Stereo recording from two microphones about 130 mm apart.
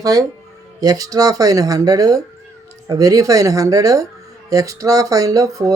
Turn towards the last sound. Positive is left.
turn(degrees=-25)  # may be behind; listen again after turning